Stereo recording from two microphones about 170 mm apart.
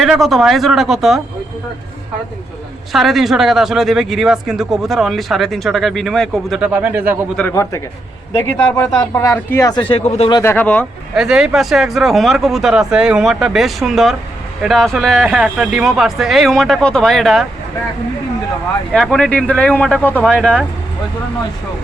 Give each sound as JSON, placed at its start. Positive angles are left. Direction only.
{"t": 0.0, "sound": "speech", "side_deg": 0}
{"t": 2.9, "sound": "speech", "side_deg": 0}
{"t": 7.3, "sound": "speech", "side_deg": 15}
{"t": 9.8, "sound": "speech", "side_deg": 35}
{"t": 10.3, "sound": "speech", "side_deg": 15}
{"t": 11.1, "sound": "speech", "side_deg": -5}
{"t": 18.9, "sound": "speech", "side_deg": 5}